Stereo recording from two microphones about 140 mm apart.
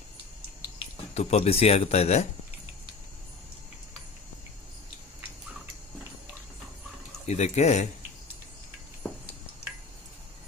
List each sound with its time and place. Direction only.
1.1 s speech: 50° left (ahead or behind)
7.2 s speech: 55° left (ahead or behind)